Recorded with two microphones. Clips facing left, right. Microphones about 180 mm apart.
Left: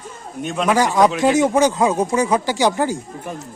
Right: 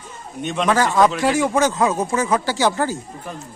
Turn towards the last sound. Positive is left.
turn(degrees=15)  # may be behind; listen again after turning